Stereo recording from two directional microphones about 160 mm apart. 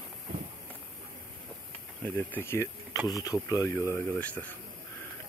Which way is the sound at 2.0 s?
10° left (ahead or behind).